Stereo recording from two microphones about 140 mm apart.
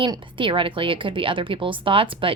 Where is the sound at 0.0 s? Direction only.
35° right (ahead or behind).